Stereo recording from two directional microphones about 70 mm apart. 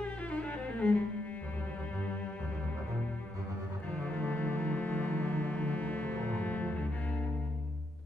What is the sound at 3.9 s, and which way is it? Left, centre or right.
Music, centre.